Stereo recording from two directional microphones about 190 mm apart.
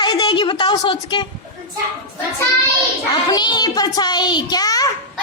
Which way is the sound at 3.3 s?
20° left (ahead or behind).